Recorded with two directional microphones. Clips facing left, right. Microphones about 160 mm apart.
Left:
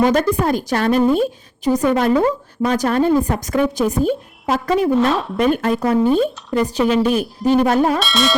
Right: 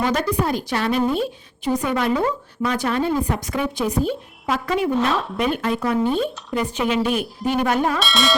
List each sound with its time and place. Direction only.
0.0 s speech: 50° left (ahead or behind)
4.9 s speech: centre (ahead or behind)
5.4 s speech: 45° left (ahead or behind)
7.9 s speech: centre (ahead or behind)